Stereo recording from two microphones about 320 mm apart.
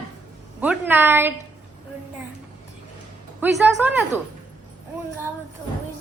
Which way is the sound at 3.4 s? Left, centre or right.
Centre.